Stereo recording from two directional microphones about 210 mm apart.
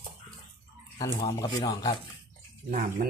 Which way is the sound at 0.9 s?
15° left (ahead or behind).